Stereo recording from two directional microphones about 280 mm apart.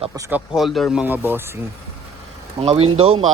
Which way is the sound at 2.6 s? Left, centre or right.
Right.